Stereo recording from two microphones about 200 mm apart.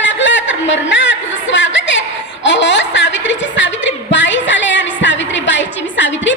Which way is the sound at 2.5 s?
65° left (ahead or behind).